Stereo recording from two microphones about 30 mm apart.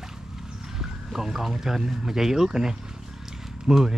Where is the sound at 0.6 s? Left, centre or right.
Centre.